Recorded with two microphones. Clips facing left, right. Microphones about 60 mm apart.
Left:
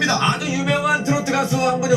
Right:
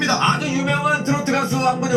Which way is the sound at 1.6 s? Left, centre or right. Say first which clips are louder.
Even; centre.